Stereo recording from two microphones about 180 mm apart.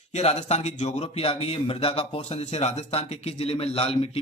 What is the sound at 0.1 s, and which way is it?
A man's voice, 35° left (ahead or behind).